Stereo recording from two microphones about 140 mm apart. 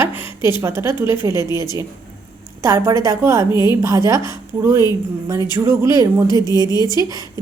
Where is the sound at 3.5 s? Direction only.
30° left (ahead or behind).